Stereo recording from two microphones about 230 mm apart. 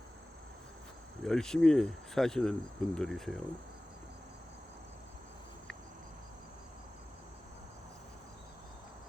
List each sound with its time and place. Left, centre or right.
1.2 s speech: centre